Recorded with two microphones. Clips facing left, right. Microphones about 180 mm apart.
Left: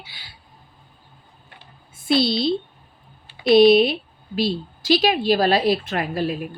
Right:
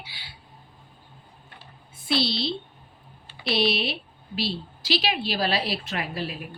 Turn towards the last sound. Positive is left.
turn(degrees=45)  # may be behind; listen again after turning